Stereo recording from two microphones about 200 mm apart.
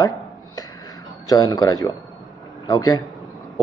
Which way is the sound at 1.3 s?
20° left (ahead or behind).